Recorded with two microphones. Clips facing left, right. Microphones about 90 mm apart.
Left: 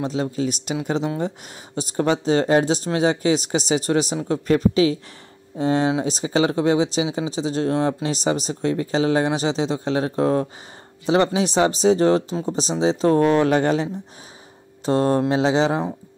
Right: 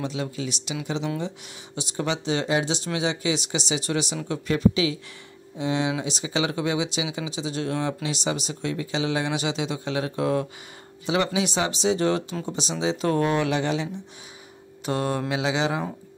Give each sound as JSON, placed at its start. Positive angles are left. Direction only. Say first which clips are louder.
{"t": 0.0, "sound": "speech", "louder": "left 6 dB", "side_deg": 35}
{"t": 14.9, "sound": "speech", "louder": "left 7 dB", "side_deg": 35}